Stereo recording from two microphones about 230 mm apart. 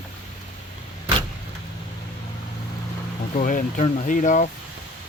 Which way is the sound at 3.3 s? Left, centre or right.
Left.